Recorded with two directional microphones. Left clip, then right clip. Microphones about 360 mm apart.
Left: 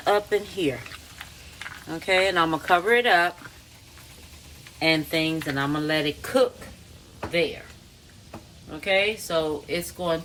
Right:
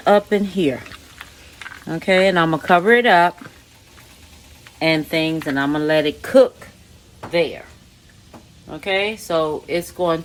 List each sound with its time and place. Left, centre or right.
0.0 s speech: right
1.9 s speech: right
4.8 s speech: right
8.7 s speech: centre